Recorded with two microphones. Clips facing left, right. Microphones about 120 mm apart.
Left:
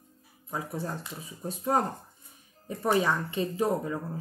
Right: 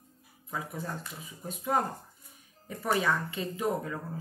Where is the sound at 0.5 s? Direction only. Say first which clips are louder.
Left 3 dB; 30° left (ahead or behind).